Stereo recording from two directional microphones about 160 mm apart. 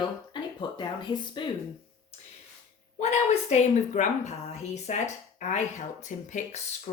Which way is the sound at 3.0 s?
45° left (ahead or behind).